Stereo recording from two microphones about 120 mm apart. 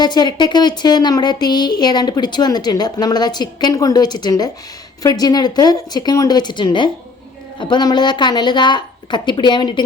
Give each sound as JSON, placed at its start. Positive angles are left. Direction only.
{"t": 0.0, "sound": "speech", "side_deg": 35}